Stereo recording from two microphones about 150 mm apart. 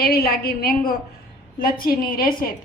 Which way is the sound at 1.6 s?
75° left (ahead or behind).